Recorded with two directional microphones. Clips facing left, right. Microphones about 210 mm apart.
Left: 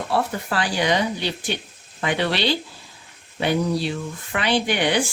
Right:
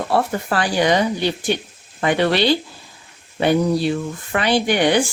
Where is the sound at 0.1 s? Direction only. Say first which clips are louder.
Right 3 dB; 50° right (ahead or behind).